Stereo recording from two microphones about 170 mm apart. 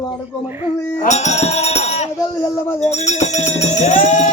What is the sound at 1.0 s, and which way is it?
Speech, 45° left (ahead or behind).